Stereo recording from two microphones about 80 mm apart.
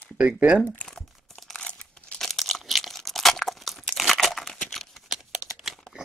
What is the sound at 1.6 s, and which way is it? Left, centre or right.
Crumpling, centre.